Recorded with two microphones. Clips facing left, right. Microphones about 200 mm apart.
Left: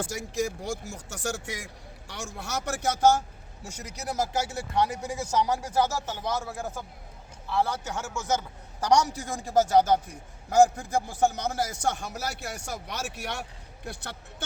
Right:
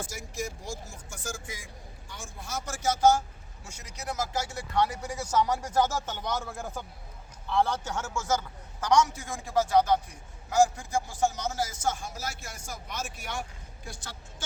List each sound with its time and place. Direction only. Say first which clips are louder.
0.0 s speech: left 6 dB; 65° left (ahead or behind)
3.8 s a man's voice: left 3 dB; 35° left (ahead or behind)
4.8 s a man's voice: left 1 dB; 15° left (ahead or behind)
8.8 s a man's voice: left 1 dB; 35° left (ahead or behind)
10.5 s speech: left 3 dB; 55° left (ahead or behind)